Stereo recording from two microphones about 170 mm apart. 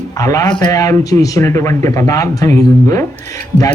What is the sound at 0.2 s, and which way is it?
Speech, 20° left (ahead or behind).